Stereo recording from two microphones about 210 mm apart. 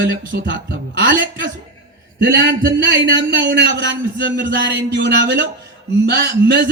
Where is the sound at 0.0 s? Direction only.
45° right (ahead or behind).